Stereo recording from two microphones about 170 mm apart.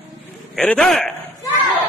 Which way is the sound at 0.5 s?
5° left (ahead or behind).